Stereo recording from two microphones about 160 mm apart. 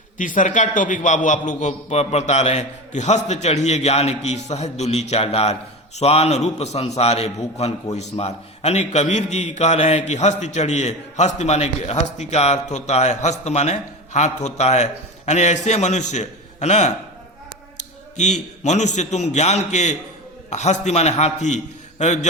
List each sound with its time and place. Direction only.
0.2 s a man's voice: 55° left (ahead or behind)
18.2 s a man's voice: 45° left (ahead or behind)